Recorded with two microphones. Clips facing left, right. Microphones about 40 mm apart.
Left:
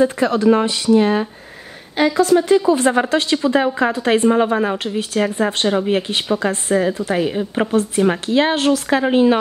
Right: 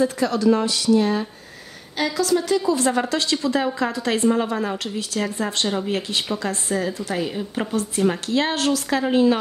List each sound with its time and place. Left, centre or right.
0.0 s speech: left